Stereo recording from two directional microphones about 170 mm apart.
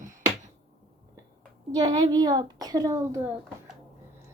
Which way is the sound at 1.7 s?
25° right (ahead or behind).